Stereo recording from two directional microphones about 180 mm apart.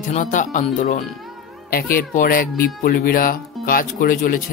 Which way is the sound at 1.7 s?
55° left (ahead or behind).